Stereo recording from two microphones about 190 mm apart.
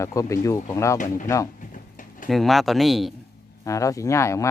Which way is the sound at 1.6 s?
45° left (ahead or behind).